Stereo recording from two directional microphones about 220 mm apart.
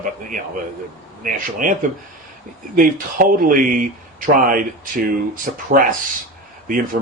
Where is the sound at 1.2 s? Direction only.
35° right (ahead or behind).